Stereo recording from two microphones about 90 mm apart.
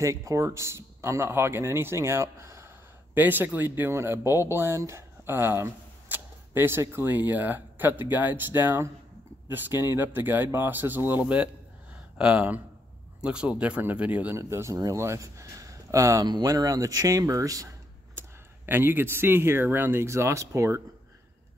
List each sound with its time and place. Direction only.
0.0 s speech: 35° right (ahead or behind)
3.2 s speech: 20° right (ahead or behind)
11.9 s a sound: 10° right (ahead or behind)
13.2 s speech: 10° right (ahead or behind)
14.3 s speech: 30° right (ahead or behind)
18.7 s speech: 25° right (ahead or behind)